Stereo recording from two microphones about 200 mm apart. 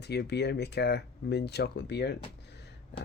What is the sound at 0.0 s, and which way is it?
Speech, 55° left (ahead or behind).